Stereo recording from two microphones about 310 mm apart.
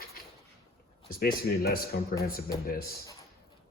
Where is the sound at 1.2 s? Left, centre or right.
Left.